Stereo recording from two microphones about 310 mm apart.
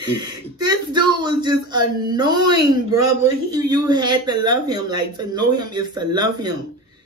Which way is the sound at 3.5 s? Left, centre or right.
Centre.